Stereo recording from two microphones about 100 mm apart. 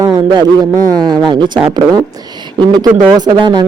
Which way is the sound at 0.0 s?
40° right (ahead or behind).